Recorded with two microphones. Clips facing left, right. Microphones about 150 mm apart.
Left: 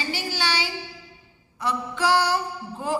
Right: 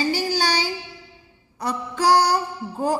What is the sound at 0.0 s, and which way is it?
Child singing, 40° right (ahead or behind).